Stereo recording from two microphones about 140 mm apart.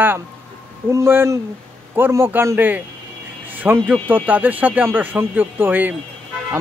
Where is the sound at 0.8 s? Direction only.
20° right (ahead or behind).